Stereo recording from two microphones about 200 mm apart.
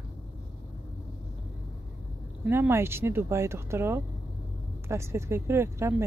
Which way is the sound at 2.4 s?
10° right (ahead or behind).